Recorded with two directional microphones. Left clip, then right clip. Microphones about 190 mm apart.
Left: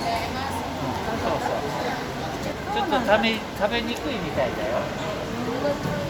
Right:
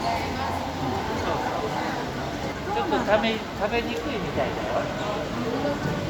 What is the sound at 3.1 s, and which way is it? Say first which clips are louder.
Speech: left 2 dB; 50° left (ahead or behind).